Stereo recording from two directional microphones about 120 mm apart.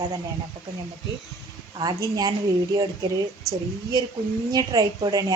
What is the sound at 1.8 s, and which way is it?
Speech, 35° right (ahead or behind).